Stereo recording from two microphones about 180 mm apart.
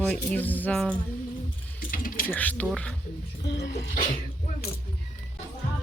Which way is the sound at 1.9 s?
50° left (ahead or behind).